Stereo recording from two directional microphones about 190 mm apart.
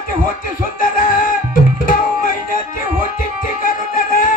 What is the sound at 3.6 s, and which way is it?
Music, 45° left (ahead or behind).